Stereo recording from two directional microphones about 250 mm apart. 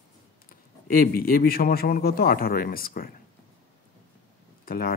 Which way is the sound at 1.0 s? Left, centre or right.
Left.